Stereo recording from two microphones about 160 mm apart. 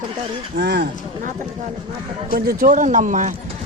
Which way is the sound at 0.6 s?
90° right.